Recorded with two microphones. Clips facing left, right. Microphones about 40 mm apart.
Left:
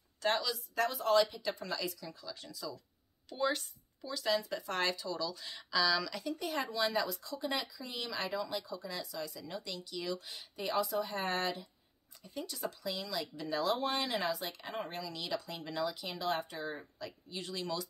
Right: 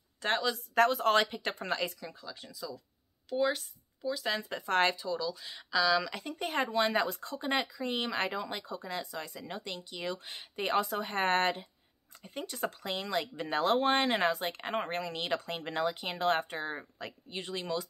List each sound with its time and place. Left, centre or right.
0.2 s speech: right
0.7 s speech: right
2.4 s speech: centre
4.3 s speech: right
4.9 s speech: centre
6.1 s speech: right